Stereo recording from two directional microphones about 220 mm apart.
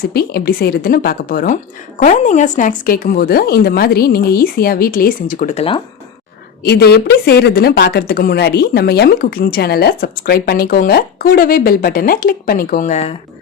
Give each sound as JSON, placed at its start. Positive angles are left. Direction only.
{"t": 0.1, "sound": "speech", "side_deg": 45}
{"t": 6.6, "sound": "speech", "side_deg": 45}